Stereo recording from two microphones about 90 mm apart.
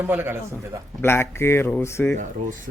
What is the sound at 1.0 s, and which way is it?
Speech, 30° left (ahead or behind).